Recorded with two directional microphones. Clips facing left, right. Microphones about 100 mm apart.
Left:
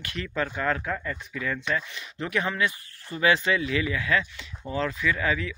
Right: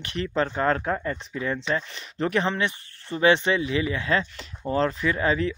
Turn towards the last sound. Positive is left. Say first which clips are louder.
# right 3 dB
turn(degrees=-35)  # may be behind; listen again after turning